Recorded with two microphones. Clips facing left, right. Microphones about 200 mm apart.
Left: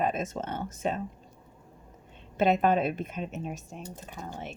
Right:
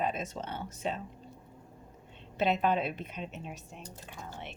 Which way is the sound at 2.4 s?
50° left (ahead or behind).